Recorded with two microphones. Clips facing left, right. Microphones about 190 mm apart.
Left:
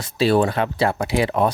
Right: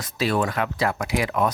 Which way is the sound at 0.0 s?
30° left (ahead or behind).